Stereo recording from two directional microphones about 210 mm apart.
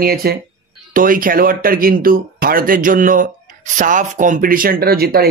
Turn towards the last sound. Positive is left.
turn(degrees=-45)  # may be behind; listen again after turning